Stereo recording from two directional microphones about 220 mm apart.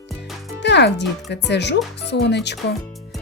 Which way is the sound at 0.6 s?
50° left (ahead or behind).